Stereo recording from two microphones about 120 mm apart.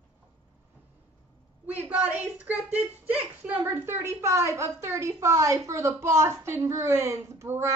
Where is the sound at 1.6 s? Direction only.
10° right (ahead or behind).